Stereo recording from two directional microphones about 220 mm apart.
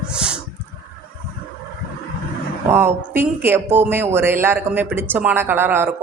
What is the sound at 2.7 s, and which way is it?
A woman's voice, 10° right (ahead or behind).